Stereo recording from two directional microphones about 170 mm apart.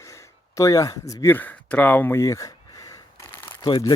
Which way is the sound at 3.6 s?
30° left (ahead or behind).